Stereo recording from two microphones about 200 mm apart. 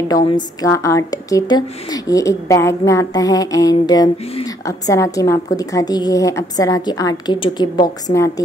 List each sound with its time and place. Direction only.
0.1 s a woman's voice: 20° left (ahead or behind)